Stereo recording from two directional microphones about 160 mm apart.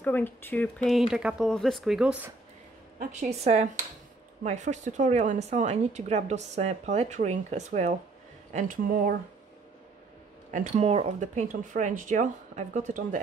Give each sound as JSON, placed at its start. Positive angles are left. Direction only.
{"t": 0.0, "sound": "speech", "side_deg": 10}
{"t": 3.0, "sound": "a woman's voice", "side_deg": -45}
{"t": 8.5, "sound": "speech", "side_deg": -55}
{"t": 10.5, "sound": "a woman's voice", "side_deg": -45}